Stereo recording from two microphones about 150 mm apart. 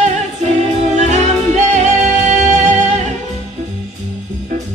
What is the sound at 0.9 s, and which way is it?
Music, 50° right (ahead or behind).